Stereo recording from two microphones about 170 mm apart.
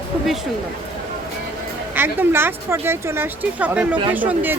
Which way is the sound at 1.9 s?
10° right (ahead or behind).